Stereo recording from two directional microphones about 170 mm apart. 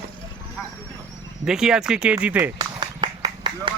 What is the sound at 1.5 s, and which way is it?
Speech, 5° right (ahead or behind).